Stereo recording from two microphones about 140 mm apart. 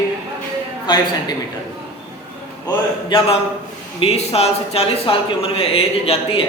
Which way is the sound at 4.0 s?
45° left (ahead or behind).